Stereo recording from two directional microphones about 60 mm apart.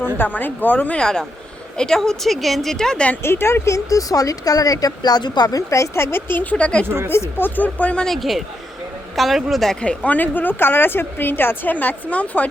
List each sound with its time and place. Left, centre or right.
0.2 s a woman's voice: left
0.9 s a woman's voice: centre
3.2 s speech: left
3.8 s speech: left; by 6.8 s centre
7.1 s a woman's voice: left
8.0 s a man's voice: centre
9.8 s a woman's voice: left